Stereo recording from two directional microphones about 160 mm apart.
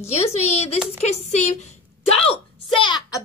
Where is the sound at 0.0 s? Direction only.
40° left (ahead or behind).